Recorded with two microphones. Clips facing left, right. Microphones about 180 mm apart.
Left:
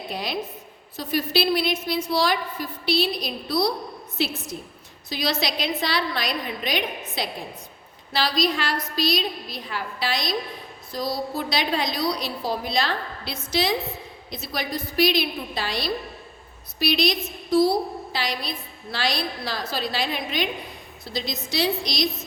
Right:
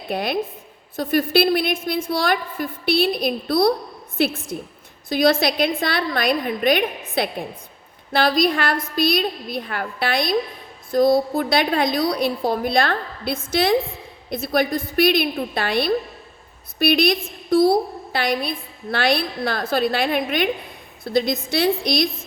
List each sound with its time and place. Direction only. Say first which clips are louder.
0.1 s a woman's voice: right 8 dB; 55° right (ahead or behind)